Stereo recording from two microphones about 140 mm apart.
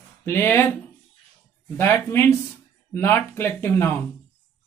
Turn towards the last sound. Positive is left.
turn(degrees=15)  # may be behind; listen again after turning